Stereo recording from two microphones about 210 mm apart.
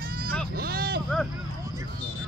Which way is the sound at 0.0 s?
45° right (ahead or behind).